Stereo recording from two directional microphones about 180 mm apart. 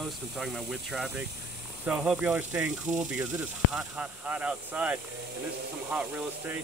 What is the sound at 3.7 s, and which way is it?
Speech, 10° right (ahead or behind).